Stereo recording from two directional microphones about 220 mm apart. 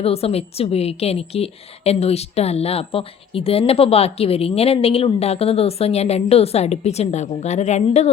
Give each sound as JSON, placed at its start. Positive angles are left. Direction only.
{"t": 0.0, "sound": "a woman's voice", "side_deg": 25}